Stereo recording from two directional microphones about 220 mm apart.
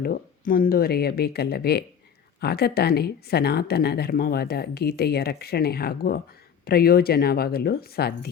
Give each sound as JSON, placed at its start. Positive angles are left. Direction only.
{"t": 0.0, "sound": "speech", "side_deg": 40}